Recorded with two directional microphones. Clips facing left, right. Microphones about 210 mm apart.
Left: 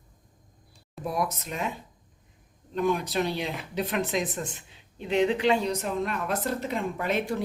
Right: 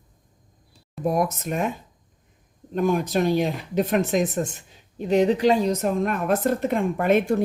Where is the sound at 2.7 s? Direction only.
45° right (ahead or behind).